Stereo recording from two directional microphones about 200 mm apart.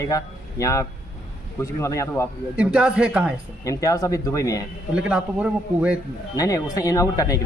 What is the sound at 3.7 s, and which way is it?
Speech, 15° left (ahead or behind).